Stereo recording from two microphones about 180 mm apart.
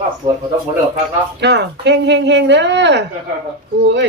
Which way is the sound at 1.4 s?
70° right (ahead or behind).